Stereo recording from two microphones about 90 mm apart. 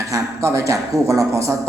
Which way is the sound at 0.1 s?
35° right (ahead or behind).